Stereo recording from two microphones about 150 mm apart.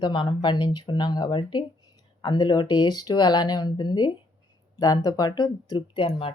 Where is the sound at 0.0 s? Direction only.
30° left (ahead or behind).